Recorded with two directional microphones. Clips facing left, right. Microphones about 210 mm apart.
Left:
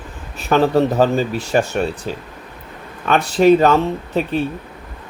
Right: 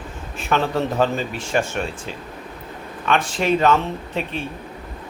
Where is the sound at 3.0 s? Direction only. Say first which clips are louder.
Left 8 dB; 40° left (ahead or behind).